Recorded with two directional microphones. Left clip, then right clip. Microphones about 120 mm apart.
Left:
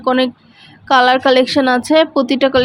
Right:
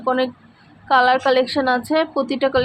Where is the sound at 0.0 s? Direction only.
55° left (ahead or behind).